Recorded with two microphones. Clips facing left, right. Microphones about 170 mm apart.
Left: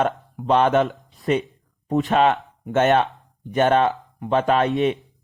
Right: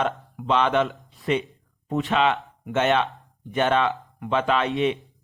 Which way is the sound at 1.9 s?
40° left (ahead or behind).